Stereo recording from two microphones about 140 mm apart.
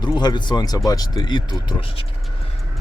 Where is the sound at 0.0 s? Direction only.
30° left (ahead or behind).